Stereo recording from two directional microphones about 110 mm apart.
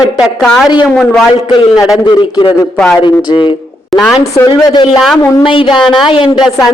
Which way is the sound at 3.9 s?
Centre (ahead or behind).